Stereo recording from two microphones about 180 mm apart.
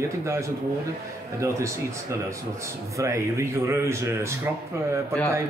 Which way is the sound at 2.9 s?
15° right (ahead or behind).